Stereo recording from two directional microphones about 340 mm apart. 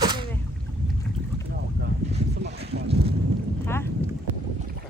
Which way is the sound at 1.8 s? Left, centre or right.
Right.